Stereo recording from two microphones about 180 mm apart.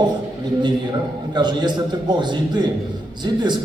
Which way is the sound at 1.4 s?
25° right (ahead or behind).